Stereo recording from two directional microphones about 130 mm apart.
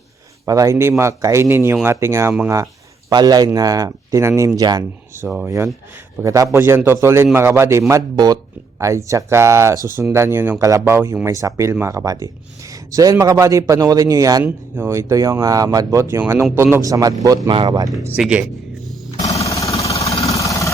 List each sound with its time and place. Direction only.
0.4 s speech: 25° right (ahead or behind)
3.1 s speech: 30° right (ahead or behind)
5.1 s speech: 15° right (ahead or behind)
5.5 s speech: 25° right (ahead or behind)
18.2 s speech: 10° right (ahead or behind)
19.2 s jackhammer: 25° left (ahead or behind)
20.1 s vehicle: 50° left (ahead or behind)
20.3 s vehicle: 25° left (ahead or behind)